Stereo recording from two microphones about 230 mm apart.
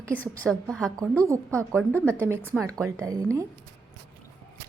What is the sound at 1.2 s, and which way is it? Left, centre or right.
A woman's voice, centre.